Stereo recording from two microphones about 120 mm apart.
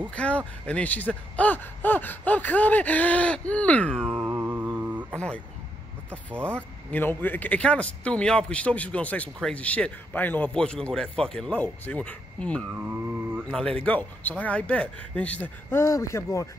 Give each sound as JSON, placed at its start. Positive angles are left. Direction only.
{"t": 0.1, "sound": "a man's voice", "side_deg": 10}
{"t": 4.1, "sound": "mantra", "side_deg": -15}
{"t": 6.3, "sound": "mantra", "side_deg": -15}
{"t": 6.9, "sound": "a man's voice", "side_deg": 15}
{"t": 12.8, "sound": "mantra", "side_deg": -15}
{"t": 13.5, "sound": "a man's voice", "side_deg": 5}
{"t": 15.8, "sound": "speech", "side_deg": 25}